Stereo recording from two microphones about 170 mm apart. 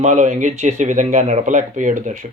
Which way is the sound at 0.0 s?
45° right (ahead or behind).